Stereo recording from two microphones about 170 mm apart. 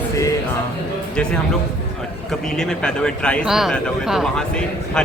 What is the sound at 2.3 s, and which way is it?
Speech, 5° left (ahead or behind).